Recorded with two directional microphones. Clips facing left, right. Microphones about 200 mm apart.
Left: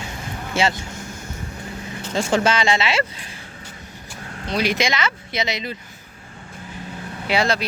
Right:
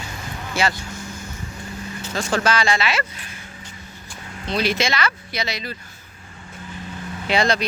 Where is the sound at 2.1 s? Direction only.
25° left (ahead or behind).